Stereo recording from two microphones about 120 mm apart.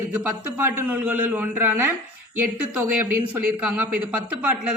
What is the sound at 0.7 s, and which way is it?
A man's voice, 15° right (ahead or behind).